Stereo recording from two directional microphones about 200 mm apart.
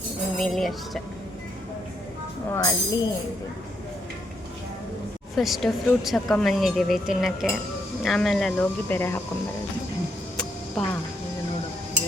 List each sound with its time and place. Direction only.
0.3 s speech: centre (ahead or behind)
2.5 s speech: 20° left (ahead or behind)
5.4 s speech: centre (ahead or behind)
10.8 s speech: centre (ahead or behind)